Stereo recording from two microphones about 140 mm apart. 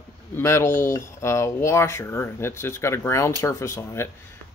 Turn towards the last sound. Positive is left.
turn(degrees=20)  # may be behind; listen again after turning